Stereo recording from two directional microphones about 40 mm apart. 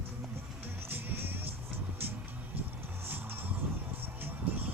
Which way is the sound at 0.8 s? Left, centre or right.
Right.